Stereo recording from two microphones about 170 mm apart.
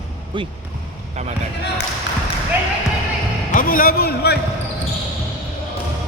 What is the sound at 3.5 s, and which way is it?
Speech, 55° left (ahead or behind).